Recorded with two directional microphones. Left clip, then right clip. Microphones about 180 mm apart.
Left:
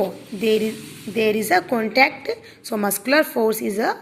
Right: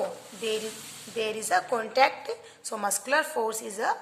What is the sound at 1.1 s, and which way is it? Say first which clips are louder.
A woman's voice: left 8 dB; 15° left (ahead or behind).